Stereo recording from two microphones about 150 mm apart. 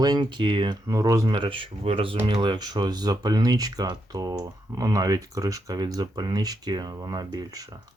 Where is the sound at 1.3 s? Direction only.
35° right (ahead or behind).